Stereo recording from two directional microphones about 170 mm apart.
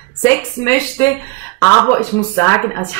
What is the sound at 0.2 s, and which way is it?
Speech, 15° left (ahead or behind).